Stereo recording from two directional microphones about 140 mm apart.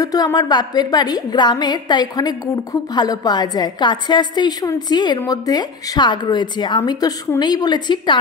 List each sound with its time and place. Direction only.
0.0 s a woman's voice: 30° left (ahead or behind)